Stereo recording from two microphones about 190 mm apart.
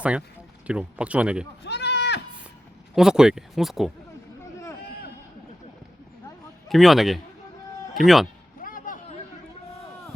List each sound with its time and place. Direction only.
0.0 s speech: 5° right (ahead or behind)
1.6 s sheep: 65° left (ahead or behind)
2.9 s speech: 5° right (ahead or behind)
6.7 s speech: centre (ahead or behind)
8.6 s a sound: 45° left (ahead or behind)